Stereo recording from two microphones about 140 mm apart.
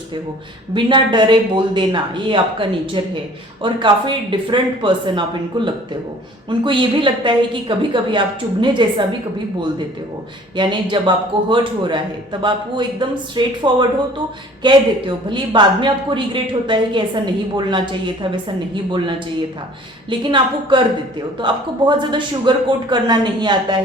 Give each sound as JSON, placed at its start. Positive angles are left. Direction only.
{"t": 0.7, "sound": "a man's voice", "side_deg": -35}
{"t": 10.5, "sound": "a man's voice", "side_deg": -35}